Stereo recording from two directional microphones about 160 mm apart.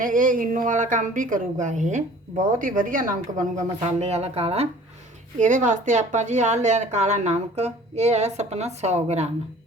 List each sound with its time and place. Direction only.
0.0 s speech: 60° right (ahead or behind)
2.6 s a woman's voice: 60° right (ahead or behind)
3.8 s speech: 40° right (ahead or behind)
5.4 s speech: 50° right (ahead or behind)